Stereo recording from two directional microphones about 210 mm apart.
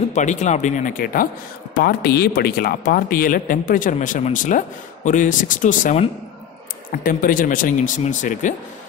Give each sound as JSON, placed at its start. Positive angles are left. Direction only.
{"t": 0.1, "sound": "speech", "side_deg": 35}